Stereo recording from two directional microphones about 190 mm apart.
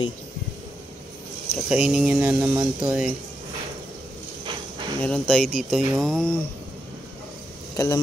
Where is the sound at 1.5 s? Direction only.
5° right (ahead or behind).